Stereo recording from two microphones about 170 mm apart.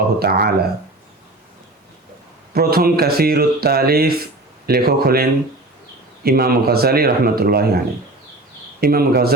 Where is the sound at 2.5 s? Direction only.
65° right (ahead or behind).